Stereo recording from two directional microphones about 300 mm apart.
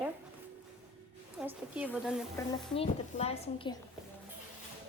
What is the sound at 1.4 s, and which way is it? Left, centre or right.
Speech, centre.